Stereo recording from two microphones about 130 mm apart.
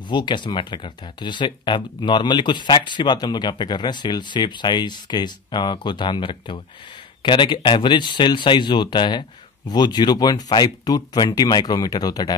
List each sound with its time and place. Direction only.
0.1 s speech: 35° left (ahead or behind)